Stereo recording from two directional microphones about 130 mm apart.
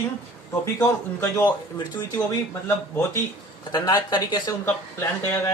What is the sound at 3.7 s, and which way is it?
Speech, 30° left (ahead or behind).